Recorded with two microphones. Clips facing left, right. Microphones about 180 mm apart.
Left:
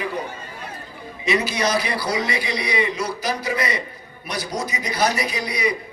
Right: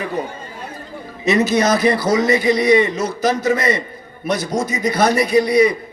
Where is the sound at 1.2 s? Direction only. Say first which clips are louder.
Right 6 dB; 45° right (ahead or behind).